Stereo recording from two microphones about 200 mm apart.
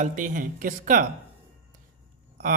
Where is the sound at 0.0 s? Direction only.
40° right (ahead or behind).